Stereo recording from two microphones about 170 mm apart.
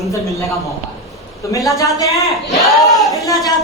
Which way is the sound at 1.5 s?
20° left (ahead or behind).